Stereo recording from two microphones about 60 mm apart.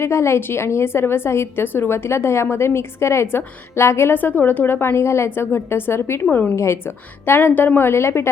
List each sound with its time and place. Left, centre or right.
0.0 s a woman's voice: left
6.3 s a woman's voice: left
6.6 s a woman's voice: left